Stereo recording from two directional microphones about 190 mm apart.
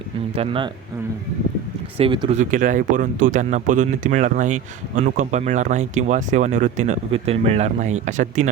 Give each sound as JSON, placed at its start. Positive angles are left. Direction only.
{"t": 0.3, "sound": "speech", "side_deg": -30}
{"t": 2.0, "sound": "speech", "side_deg": -25}
{"t": 2.4, "sound": "speech", "side_deg": -45}